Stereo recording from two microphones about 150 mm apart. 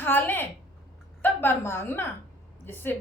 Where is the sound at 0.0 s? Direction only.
15° left (ahead or behind).